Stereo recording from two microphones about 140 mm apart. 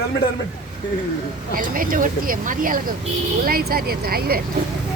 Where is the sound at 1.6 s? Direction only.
75° right (ahead or behind).